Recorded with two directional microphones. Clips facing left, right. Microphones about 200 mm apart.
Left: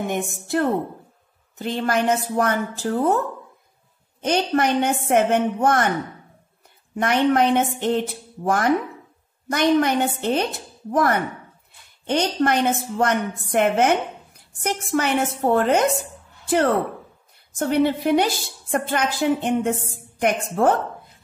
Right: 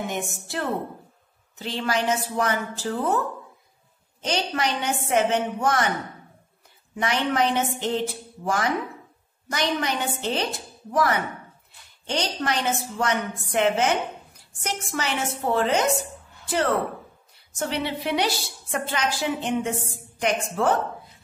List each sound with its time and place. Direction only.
0.1 s a woman's voice: 55° left (ahead or behind)
4.2 s a woman's voice: 55° left (ahead or behind)
7.0 s a woman's voice: 55° left (ahead or behind)
17.6 s a woman's voice: 50° left (ahead or behind)